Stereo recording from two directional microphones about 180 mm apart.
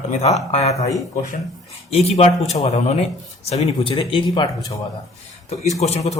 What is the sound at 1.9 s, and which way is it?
Speech, 35° left (ahead or behind).